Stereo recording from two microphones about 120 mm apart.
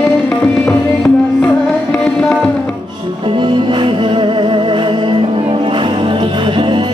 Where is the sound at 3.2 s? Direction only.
45° right (ahead or behind).